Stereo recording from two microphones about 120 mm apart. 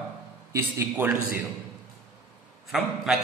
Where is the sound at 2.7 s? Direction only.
Centre (ahead or behind).